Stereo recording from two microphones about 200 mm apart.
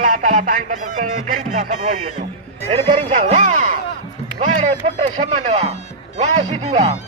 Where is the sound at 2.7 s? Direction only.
30° right (ahead or behind).